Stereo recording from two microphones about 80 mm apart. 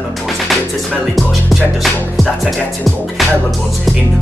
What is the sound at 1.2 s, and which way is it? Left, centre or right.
Music, centre.